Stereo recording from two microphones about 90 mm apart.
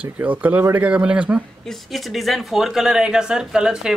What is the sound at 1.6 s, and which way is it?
Speech, centre (ahead or behind).